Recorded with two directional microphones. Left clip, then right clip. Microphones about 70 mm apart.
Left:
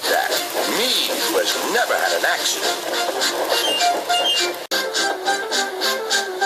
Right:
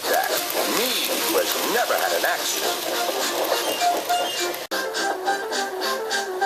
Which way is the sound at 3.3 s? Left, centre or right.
Left.